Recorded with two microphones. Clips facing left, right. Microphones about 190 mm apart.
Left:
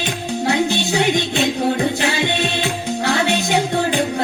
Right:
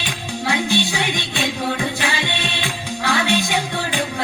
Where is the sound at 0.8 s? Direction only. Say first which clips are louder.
Left 5 dB; 45° left (ahead or behind).